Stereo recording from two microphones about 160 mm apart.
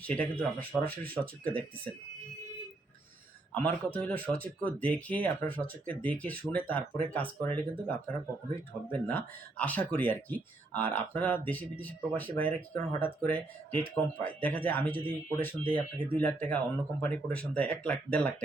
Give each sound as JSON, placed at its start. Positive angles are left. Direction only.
{"t": 0.0, "sound": "speech", "side_deg": 10}
{"t": 3.5, "sound": "speech", "side_deg": 10}